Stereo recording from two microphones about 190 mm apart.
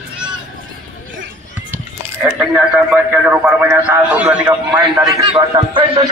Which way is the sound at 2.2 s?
5° right (ahead or behind).